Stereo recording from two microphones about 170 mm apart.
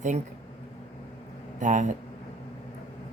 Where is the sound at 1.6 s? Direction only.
45° right (ahead or behind).